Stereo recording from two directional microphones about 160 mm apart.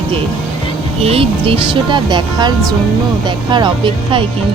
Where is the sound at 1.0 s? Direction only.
35° right (ahead or behind).